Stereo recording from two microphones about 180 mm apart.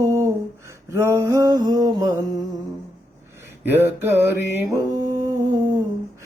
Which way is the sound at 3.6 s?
10° right (ahead or behind).